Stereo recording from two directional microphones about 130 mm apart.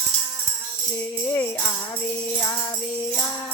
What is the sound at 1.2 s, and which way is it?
Music, 20° left (ahead or behind).